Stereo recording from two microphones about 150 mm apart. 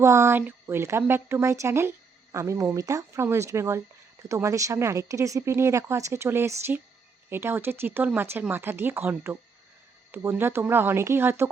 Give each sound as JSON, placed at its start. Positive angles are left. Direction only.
{"t": 0.0, "sound": "speech", "side_deg": -20}